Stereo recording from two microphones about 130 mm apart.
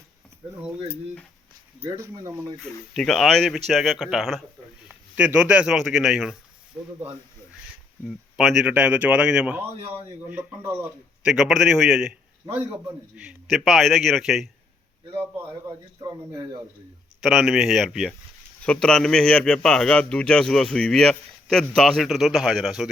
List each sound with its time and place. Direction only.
1.8 s speech: 45° right (ahead or behind)
2.6 s a man's voice: 5° left (ahead or behind)
8.0 s speech: centre (ahead or behind); by 10.9 s 20° right (ahead or behind)
11.2 s a man's voice: 5° right (ahead or behind)
13.1 s a man's voice: 5° right (ahead or behind)
16.0 s speech: 30° right (ahead or behind)
17.2 s a man's voice: centre (ahead or behind)